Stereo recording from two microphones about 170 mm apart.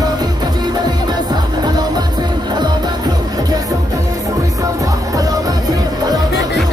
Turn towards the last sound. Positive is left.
turn(degrees=-20)  # may be behind; listen again after turning